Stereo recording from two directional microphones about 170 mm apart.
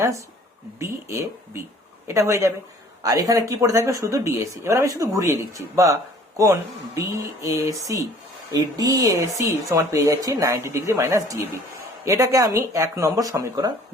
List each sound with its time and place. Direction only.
0.8 s speech: 15° right (ahead or behind)